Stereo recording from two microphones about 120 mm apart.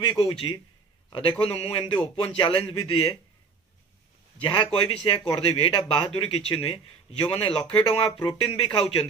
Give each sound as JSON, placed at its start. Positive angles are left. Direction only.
{"t": 0.0, "sound": "a man's voice", "side_deg": 40}
{"t": 4.4, "sound": "speech", "side_deg": 45}